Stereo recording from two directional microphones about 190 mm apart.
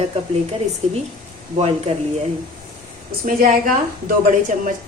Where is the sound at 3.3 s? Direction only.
45° right (ahead or behind).